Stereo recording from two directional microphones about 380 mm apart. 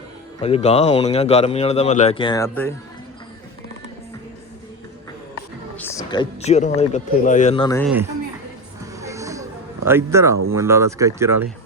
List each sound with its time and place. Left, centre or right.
0.3 s a man's voice: centre
5.7 s speech: centre
9.0 s a sound: centre
10.5 s speech: centre